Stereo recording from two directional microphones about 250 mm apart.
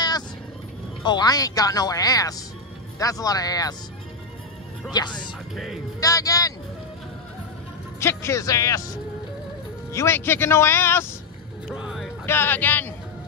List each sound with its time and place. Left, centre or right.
1.0 s speech: centre
4.9 s speech: centre
8.0 s speech: centre
11.7 s music: centre
12.3 s speech: centre